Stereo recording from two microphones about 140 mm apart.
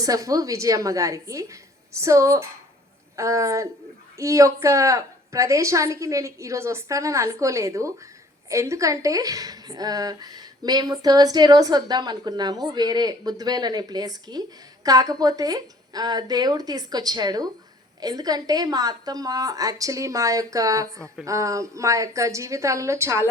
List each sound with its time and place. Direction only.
0.0 s a woman's voice: 25° right (ahead or behind)